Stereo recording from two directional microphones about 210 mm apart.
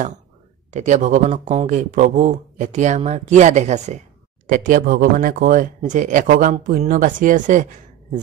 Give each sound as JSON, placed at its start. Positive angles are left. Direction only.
{"t": 0.7, "sound": "speech", "side_deg": -35}